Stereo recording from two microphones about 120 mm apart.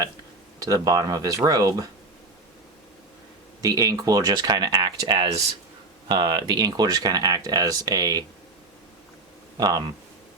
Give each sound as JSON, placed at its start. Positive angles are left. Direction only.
{"t": 0.6, "sound": "speech", "side_deg": -30}
{"t": 3.6, "sound": "speech", "side_deg": -30}
{"t": 9.6, "sound": "speech", "side_deg": -35}